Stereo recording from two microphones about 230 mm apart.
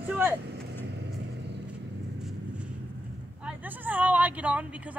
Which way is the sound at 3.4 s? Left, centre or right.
Centre.